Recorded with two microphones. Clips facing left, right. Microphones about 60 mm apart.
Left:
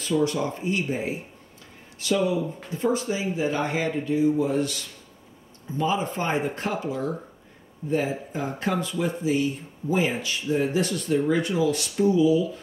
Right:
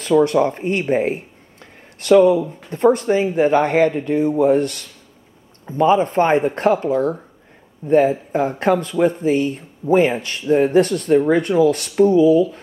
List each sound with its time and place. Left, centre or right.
0.0 s speech: right